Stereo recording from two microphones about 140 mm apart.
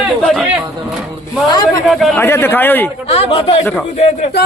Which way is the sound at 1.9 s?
Centre (ahead or behind).